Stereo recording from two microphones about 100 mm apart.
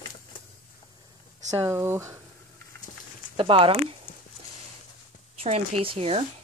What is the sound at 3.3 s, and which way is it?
Speech, 65° right (ahead or behind).